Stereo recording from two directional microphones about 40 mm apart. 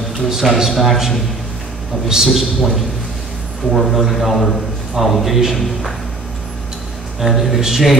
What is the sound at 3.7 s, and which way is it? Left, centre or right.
A man's voice, centre.